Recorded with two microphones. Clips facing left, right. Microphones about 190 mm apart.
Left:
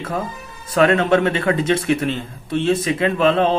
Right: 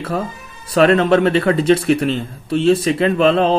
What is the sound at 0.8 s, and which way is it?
Speech, 35° right (ahead or behind).